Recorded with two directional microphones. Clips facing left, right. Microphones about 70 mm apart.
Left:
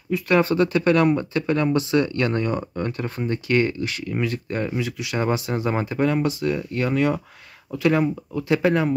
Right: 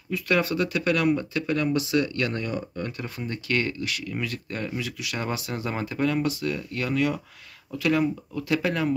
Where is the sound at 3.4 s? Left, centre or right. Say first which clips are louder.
Left 5 dB; left.